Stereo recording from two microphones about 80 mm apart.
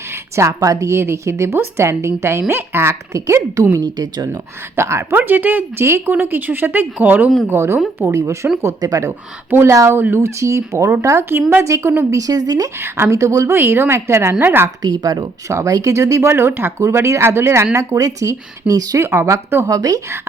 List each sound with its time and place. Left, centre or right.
0.1 s a woman's voice: right
3.8 s speech: right
4.8 s a woman's voice: right
5.1 s a woman's voice: right
9.5 s speech: right
9.7 s a woman's voice: right
11.6 s a woman's voice: right
13.1 s a woman's voice: right
14.8 s speech: right
15.4 s a woman's voice: right
17.7 s a woman's voice: right
18.9 s a woman's voice: right
19.7 s a woman's voice: right